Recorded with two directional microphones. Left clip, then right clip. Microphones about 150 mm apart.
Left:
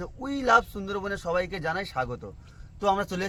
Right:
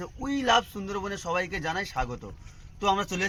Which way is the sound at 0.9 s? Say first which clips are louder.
Left 2 dB; 25° left (ahead or behind).